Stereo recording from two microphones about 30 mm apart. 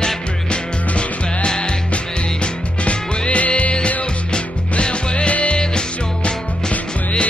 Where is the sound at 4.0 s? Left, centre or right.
Left.